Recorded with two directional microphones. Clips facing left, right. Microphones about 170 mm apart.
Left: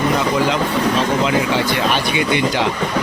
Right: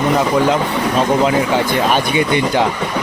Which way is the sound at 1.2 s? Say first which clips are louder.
Right 3 dB; 50° right (ahead or behind).